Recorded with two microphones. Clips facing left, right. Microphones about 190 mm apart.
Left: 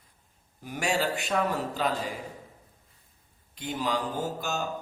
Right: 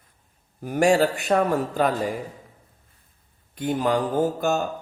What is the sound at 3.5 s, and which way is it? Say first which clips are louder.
Speech: right 8 dB; 55° right (ahead or behind).